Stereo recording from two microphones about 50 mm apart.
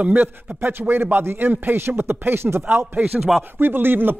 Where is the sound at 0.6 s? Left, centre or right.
Right.